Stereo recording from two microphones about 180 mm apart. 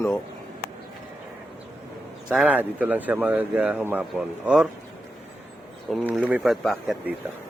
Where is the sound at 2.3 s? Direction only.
5° right (ahead or behind).